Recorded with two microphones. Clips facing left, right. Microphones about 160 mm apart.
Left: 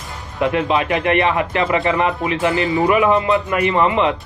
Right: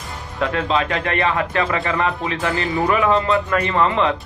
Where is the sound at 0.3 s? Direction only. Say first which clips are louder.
Left 3 dB; 15° left (ahead or behind).